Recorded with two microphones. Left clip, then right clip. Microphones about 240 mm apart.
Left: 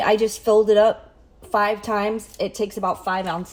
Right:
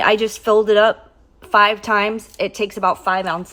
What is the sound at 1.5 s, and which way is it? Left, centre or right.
Speech, right.